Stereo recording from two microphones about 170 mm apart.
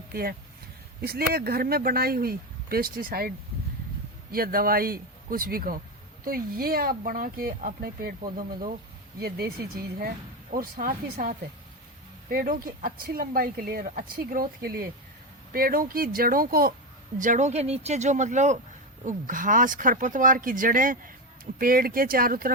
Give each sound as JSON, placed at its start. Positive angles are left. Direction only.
{"t": 0.1, "sound": "speech", "side_deg": -65}
{"t": 9.2, "sound": "speech", "side_deg": -65}
{"t": 17.2, "sound": "speech", "side_deg": -45}